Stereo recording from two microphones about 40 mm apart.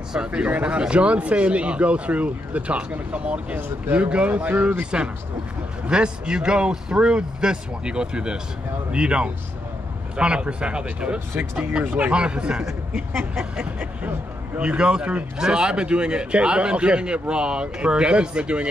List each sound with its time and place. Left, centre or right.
0.1 s a man's voice: right
3.5 s speech: right
4.0 s a man's voice: right
4.3 s speech: right
5.9 s a man's voice: right